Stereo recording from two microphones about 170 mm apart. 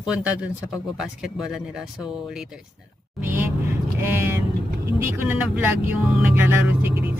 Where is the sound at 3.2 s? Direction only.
10° right (ahead or behind).